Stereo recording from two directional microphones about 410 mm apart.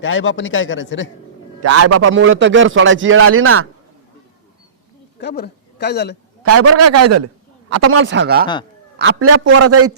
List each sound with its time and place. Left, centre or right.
0.0 s a man's voice: left
1.6 s a man's voice: right
5.2 s a man's voice: left
6.4 s a man's voice: right